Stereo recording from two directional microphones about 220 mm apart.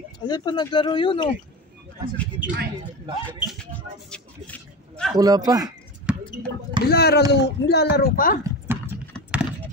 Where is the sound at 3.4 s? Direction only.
5° left (ahead or behind).